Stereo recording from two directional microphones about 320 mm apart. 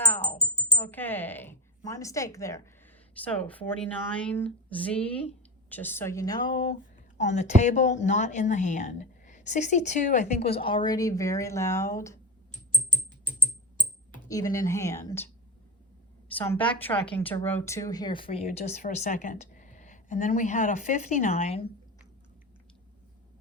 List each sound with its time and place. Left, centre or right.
0.0 s music: centre
3.2 s speech: centre
12.7 s typing: centre
14.3 s speech: centre
16.3 s speech: centre